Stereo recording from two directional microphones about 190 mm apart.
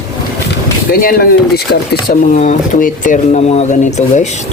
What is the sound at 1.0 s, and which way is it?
Speech, 50° left (ahead or behind).